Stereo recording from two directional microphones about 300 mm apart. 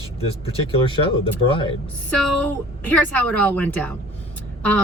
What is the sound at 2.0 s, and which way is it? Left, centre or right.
A woman's voice, centre.